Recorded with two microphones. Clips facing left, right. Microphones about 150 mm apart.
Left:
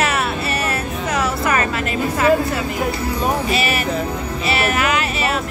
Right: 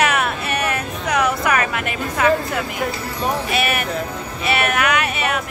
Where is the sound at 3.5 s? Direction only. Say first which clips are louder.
Left 1 dB; 55° right (ahead or behind).